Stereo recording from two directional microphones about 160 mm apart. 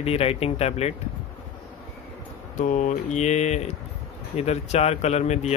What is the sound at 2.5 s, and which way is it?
Speech, 50° left (ahead or behind).